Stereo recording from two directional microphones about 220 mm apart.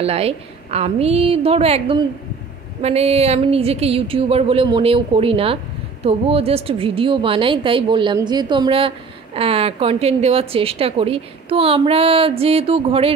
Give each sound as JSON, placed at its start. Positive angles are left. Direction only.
{"t": 0.0, "sound": "a woman's voice", "side_deg": -25}